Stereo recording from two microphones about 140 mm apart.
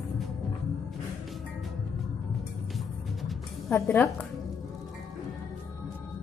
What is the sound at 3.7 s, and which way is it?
Speech, 15° left (ahead or behind).